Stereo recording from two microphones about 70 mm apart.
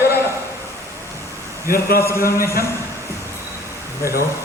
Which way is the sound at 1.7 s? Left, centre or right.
Left.